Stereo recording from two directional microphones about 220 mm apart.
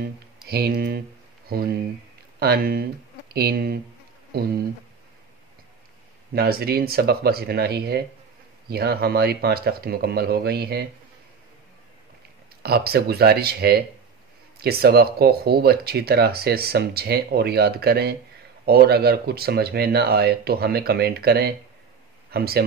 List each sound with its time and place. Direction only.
0.5 s speech: 45° right (ahead or behind)
6.3 s speech: 45° right (ahead or behind)
12.6 s speech: 45° right (ahead or behind)